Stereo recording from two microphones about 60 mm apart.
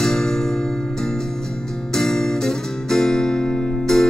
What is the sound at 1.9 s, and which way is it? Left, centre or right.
Guitar, centre.